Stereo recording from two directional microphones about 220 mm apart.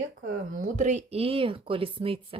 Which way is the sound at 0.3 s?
40° right (ahead or behind).